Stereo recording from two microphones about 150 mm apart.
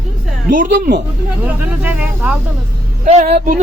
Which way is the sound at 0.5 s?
70° right (ahead or behind).